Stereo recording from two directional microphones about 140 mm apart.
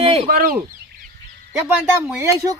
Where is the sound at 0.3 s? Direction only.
90° right.